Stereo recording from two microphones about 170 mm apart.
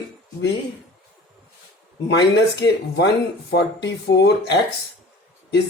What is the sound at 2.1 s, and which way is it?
Speech, 90° left.